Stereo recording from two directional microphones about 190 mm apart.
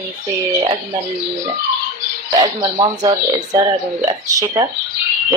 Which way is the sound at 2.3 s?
20° right (ahead or behind).